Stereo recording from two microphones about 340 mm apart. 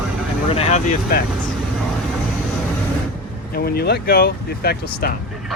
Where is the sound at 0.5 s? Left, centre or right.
Centre.